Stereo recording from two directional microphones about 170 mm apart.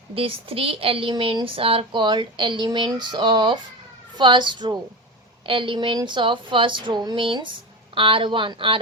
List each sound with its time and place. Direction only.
0.1 s a woman's voice: 35° right (ahead or behind)